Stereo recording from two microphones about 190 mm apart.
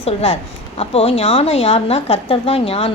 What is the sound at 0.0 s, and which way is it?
A woman's voice, 35° left (ahead or behind).